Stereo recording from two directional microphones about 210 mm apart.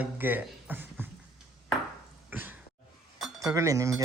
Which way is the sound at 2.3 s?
10° right (ahead or behind).